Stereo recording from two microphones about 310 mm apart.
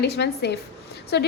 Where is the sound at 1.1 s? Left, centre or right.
Left.